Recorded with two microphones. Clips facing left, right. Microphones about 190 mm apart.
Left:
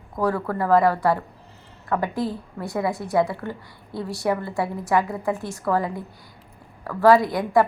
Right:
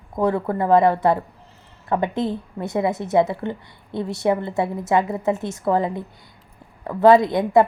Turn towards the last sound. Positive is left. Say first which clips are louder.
# right 3 dB
turn(degrees=-20)  # may be behind; listen again after turning